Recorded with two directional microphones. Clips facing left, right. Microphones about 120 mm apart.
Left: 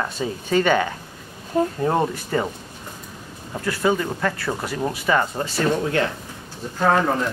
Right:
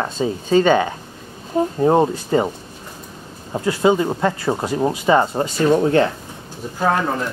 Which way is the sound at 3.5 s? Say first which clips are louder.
Right 5 dB; 20° right (ahead or behind).